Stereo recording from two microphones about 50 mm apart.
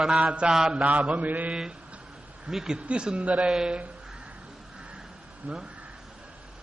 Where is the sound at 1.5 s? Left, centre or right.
Centre.